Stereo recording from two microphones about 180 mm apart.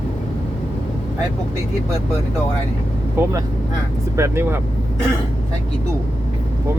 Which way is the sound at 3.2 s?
10° right (ahead or behind).